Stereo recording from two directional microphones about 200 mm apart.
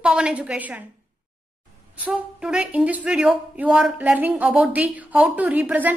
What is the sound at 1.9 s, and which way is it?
Speech, 5° right (ahead or behind).